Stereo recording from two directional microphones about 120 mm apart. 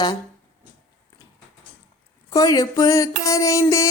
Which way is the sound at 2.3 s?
30° left (ahead or behind).